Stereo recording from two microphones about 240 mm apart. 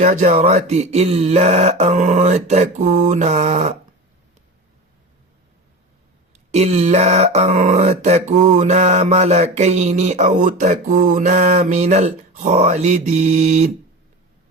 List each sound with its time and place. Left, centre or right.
0.0 s speech: right
6.3 s speech: right